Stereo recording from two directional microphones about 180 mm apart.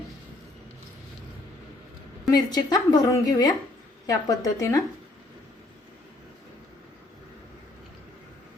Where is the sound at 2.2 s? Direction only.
20° left (ahead or behind).